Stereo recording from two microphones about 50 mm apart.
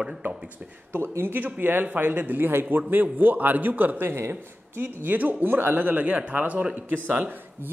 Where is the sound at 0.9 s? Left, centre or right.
Right.